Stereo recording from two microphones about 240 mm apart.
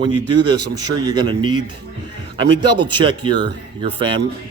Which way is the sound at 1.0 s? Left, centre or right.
Centre.